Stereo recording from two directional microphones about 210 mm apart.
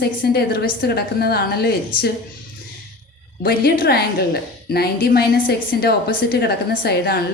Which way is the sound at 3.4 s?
45° left (ahead or behind).